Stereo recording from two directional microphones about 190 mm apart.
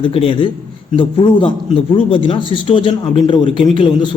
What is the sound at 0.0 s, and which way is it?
Speech, 30° left (ahead or behind).